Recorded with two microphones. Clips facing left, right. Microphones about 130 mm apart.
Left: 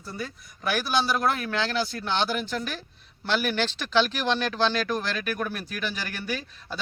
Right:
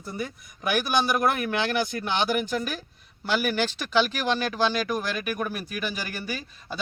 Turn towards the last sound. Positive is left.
turn(degrees=-10)  # may be behind; listen again after turning